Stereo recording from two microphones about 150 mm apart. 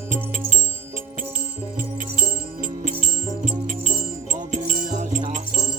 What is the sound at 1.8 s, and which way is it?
Music, 65° right (ahead or behind).